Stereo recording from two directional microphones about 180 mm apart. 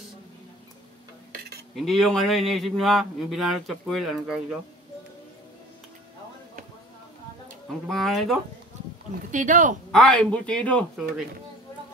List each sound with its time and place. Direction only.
1.8 s speech: centre (ahead or behind)
7.9 s speech: centre (ahead or behind)
9.3 s speech: 45° right (ahead or behind)
9.9 s speech: 5° left (ahead or behind)